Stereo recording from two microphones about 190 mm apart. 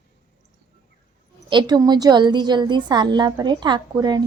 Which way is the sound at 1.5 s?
25° right (ahead or behind).